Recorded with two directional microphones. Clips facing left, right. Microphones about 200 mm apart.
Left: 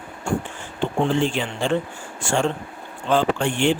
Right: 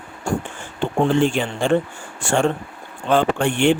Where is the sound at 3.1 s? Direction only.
60° right (ahead or behind).